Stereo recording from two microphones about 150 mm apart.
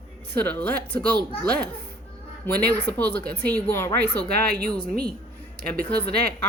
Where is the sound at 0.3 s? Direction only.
10° left (ahead or behind).